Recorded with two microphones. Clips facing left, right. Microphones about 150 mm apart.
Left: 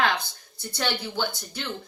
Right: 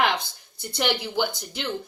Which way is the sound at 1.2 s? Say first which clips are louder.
Right 4 dB; 15° right (ahead or behind).